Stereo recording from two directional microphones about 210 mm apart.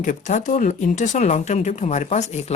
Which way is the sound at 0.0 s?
40° left (ahead or behind).